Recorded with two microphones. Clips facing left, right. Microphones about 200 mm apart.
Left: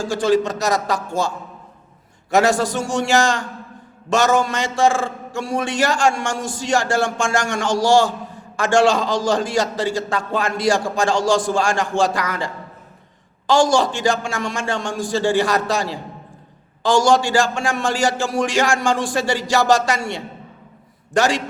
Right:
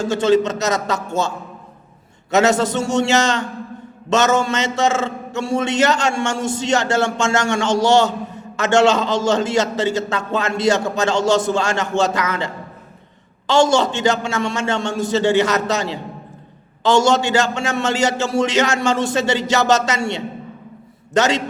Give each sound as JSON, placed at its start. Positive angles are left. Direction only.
{"t": 0.0, "sound": "a man's voice", "side_deg": -25}
{"t": 2.3, "sound": "a man's voice", "side_deg": -20}
{"t": 13.5, "sound": "a man's voice", "side_deg": -25}